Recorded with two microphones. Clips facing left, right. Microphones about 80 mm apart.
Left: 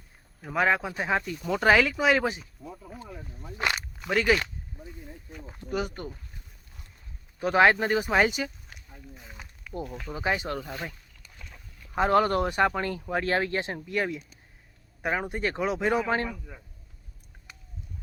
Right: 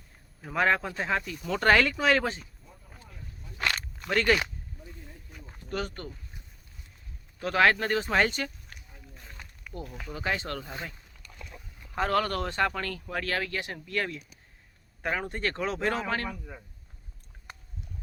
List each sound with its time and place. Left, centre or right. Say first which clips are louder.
0.4 s speech: left 1 dB; centre
3.6 s a sound: left 2 dB; centre
3.9 s speech: left 1 dB; centre
5.5 s speech: left 3 dB; centre
7.3 s speech: left 3 dB; centre
10.2 s speech: left 3 dB; centre
11.9 s speech: left 5 dB; centre